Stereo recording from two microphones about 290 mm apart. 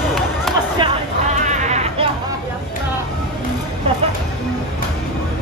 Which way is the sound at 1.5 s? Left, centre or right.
Right.